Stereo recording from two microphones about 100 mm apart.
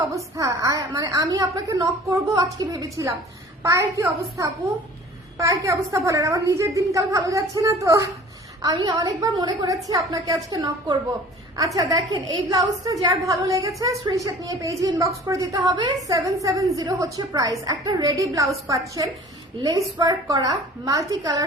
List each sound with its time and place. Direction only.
0.1 s a woman's voice: 35° right (ahead or behind)
8.6 s a woman's voice: 55° right (ahead or behind)
9.0 s a woman's voice: 40° right (ahead or behind)